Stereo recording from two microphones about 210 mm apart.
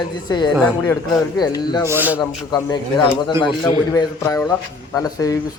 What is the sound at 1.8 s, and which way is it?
Speech, 10° right (ahead or behind).